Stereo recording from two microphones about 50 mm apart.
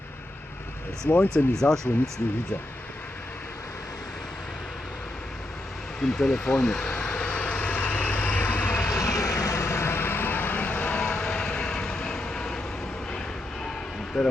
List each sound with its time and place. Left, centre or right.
1.1 s speech: left
6.0 s speech: centre
6.8 s vehicle: left
9.0 s vehicle: left
10.9 s vehicle: centre
14.1 s speech: centre